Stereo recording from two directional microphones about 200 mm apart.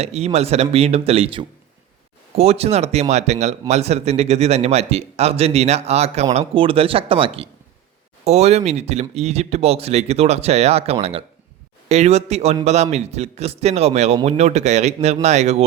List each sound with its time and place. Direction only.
0.0 s speech: 30° right (ahead or behind)